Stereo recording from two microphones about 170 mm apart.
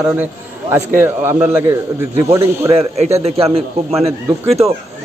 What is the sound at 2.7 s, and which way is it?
A man's voice, 40° right (ahead or behind).